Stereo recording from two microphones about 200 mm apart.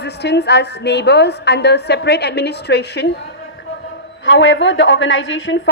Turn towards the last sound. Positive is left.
turn(degrees=70)  # may be behind; listen again after turning